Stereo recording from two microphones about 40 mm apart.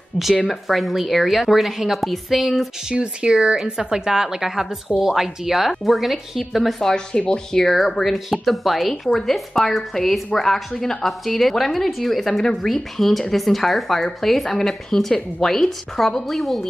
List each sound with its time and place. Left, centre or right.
0.5 s a woman's voice: centre
2.9 s speech: right
3.3 s a woman's voice: centre
7.2 s speech: left
7.6 s a woman's voice: centre